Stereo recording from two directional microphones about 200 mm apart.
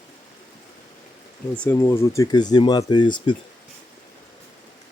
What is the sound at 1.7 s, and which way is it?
Speech, 15° left (ahead or behind).